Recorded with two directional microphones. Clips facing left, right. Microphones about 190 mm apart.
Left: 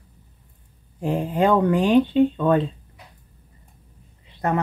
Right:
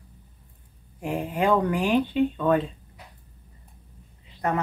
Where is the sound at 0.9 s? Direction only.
30° left (ahead or behind).